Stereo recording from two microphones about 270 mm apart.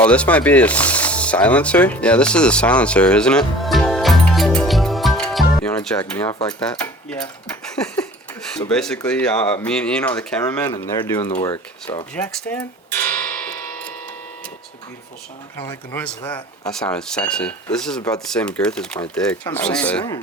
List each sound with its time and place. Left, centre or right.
0.0 s speech: centre
12.1 s tick-tock: centre
15.5 s speech: centre